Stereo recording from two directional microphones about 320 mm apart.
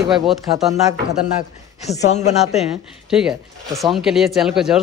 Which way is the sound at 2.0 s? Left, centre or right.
Left.